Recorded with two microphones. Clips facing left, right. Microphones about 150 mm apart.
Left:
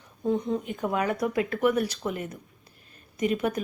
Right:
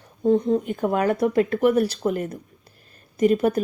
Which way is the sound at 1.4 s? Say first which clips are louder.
Right 5 dB; 35° right (ahead or behind).